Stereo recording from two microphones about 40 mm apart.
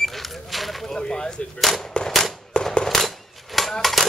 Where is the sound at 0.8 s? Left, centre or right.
Centre.